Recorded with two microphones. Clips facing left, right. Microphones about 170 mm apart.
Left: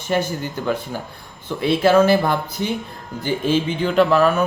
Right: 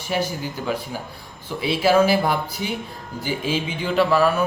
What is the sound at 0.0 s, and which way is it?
Speech, 10° right (ahead or behind).